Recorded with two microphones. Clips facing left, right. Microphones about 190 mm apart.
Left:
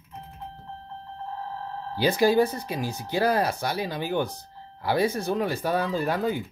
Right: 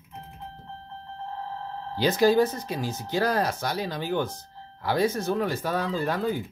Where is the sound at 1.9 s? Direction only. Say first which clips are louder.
Even; 15° left (ahead or behind).